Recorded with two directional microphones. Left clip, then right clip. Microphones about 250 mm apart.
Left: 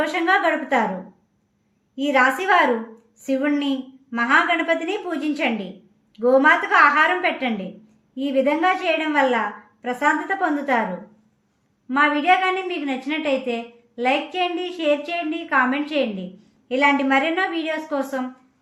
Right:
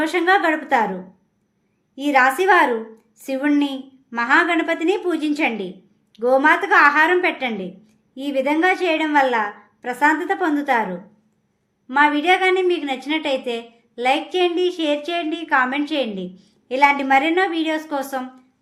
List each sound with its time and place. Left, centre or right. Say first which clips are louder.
0.0 s a woman's voice: right 2 dB; right
2.0 s a woman's voice: right 2 dB; right
11.9 s a woman's voice: right 1 dB; right